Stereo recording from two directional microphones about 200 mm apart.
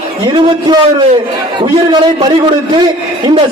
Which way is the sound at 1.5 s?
20° right (ahead or behind).